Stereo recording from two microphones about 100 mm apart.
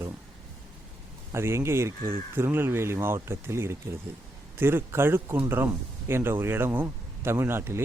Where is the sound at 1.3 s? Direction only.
25° right (ahead or behind).